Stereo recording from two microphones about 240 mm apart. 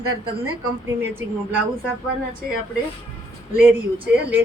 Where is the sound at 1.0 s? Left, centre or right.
Centre.